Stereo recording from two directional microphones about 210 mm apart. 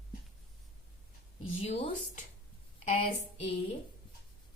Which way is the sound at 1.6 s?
30° left (ahead or behind).